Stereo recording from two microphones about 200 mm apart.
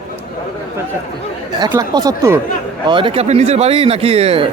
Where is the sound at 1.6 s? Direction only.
20° right (ahead or behind).